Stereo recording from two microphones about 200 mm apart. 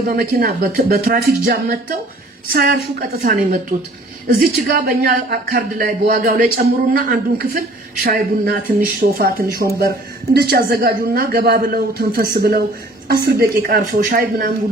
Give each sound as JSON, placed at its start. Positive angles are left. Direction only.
{"t": 0.1, "sound": "speech", "side_deg": -50}